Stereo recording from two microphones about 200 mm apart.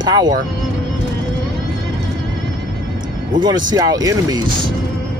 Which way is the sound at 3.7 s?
20° right (ahead or behind).